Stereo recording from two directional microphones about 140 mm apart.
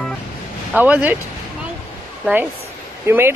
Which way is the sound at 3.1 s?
15° right (ahead or behind).